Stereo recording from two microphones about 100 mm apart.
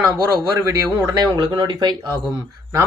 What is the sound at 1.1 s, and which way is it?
Speech, 45° right (ahead or behind).